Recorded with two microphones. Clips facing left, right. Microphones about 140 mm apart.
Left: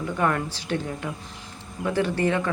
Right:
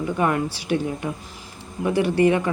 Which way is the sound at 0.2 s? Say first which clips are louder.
Right 1 dB; 10° right (ahead or behind).